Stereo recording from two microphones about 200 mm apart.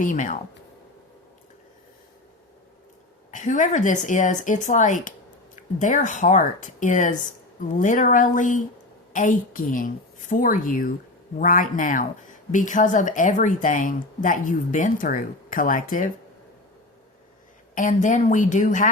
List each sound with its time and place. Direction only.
0.0 s speech: 40° left (ahead or behind)
3.3 s speech: 40° left (ahead or behind)
17.7 s speech: 40° left (ahead or behind)